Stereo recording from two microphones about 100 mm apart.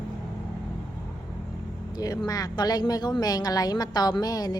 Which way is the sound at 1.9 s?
40° left (ahead or behind).